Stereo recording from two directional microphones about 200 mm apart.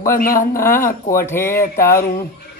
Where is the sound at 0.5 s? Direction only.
15° left (ahead or behind).